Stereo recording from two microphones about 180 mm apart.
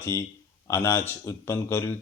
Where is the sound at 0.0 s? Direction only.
15° left (ahead or behind).